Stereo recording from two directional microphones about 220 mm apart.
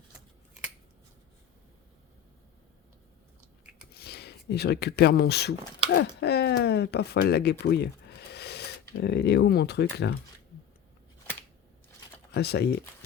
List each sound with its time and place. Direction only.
3.9 s speech: 45° left (ahead or behind)
12.3 s speech: 50° left (ahead or behind)